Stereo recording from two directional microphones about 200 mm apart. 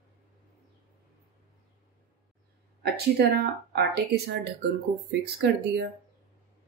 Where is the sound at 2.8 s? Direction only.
50° right (ahead or behind).